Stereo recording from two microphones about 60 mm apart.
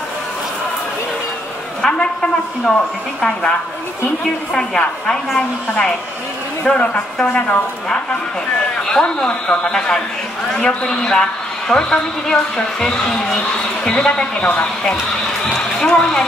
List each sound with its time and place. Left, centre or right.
1.8 s a sound: centre
3.2 s a woman's voice: centre
4.6 s a woman's voice: centre
6.6 s a man's voice: centre
8.9 s a woman's voice: centre